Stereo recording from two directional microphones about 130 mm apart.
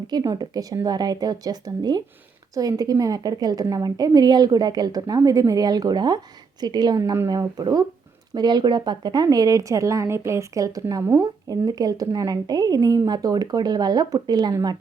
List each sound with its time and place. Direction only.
0.1 s speech: 30° right (ahead or behind)